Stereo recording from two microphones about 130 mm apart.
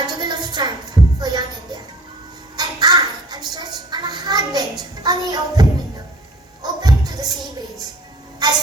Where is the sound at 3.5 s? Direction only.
30° right (ahead or behind).